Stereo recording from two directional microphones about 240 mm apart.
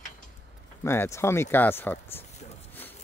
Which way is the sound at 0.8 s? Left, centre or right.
Centre.